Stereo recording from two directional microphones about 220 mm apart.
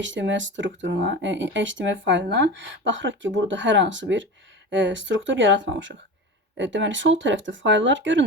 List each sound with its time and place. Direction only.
0.0 s speech: 55° right (ahead or behind)